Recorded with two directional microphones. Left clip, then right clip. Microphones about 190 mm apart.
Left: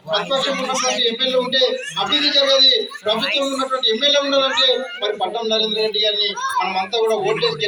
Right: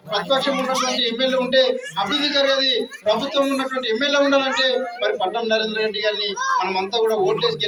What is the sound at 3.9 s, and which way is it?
Speech, centre (ahead or behind).